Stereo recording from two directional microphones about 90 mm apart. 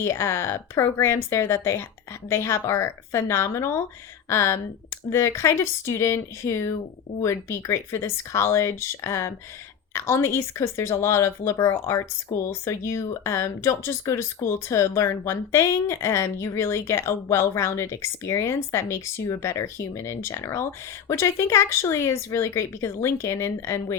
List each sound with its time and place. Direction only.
0.0 s speech: 30° left (ahead or behind)